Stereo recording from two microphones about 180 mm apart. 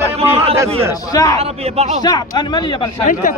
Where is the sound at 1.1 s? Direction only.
20° left (ahead or behind).